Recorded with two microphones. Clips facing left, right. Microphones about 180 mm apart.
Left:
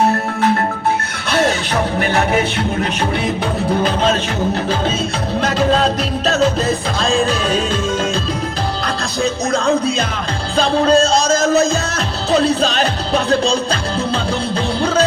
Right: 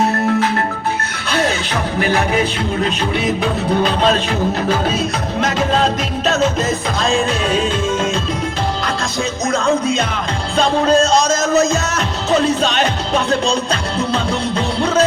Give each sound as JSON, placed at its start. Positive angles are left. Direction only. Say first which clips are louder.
{"t": 6.2, "sound": "music", "louder": "left 1 dB", "side_deg": 35}
{"t": 9.5, "sound": "music", "louder": "right 2 dB", "side_deg": 35}